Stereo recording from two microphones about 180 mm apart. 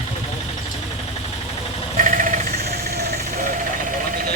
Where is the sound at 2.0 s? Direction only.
45° right (ahead or behind); by 3.4 s 65° right (ahead or behind).